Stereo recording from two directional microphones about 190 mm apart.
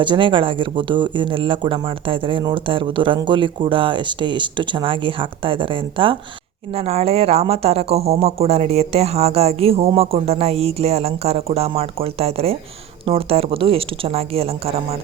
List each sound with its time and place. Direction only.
0.0 s speech: 25° right (ahead or behind)